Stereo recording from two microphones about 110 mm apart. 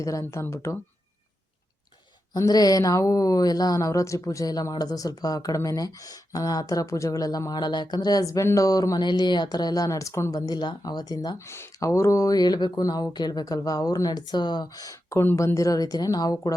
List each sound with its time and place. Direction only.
0.0 s speech: 30° left (ahead or behind)
2.3 s a woman's voice: 35° left (ahead or behind)
11.3 s a woman's voice: 25° left (ahead or behind)
15.2 s a woman's voice: 20° left (ahead or behind)